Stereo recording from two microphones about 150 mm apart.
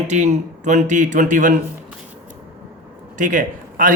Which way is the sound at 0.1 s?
50° right (ahead or behind).